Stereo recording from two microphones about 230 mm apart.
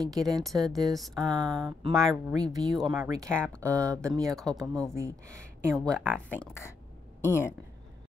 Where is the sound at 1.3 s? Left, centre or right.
Centre.